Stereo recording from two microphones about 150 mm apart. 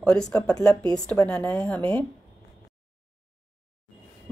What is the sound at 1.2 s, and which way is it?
Speech, 5° left (ahead or behind).